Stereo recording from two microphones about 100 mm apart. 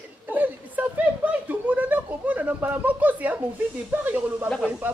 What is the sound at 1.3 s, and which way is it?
Speech, 15° right (ahead or behind).